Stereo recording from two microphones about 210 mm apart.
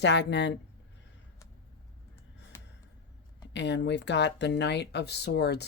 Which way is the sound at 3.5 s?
55° left (ahead or behind).